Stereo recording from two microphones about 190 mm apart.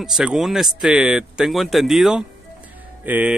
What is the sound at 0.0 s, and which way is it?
Speech, 5° right (ahead or behind).